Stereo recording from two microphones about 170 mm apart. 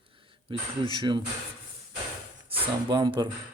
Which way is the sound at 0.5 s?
30° right (ahead or behind).